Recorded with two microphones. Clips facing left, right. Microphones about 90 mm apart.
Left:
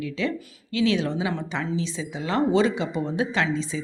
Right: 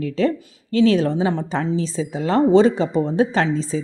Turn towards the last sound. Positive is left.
turn(degrees=-40)  # may be behind; listen again after turning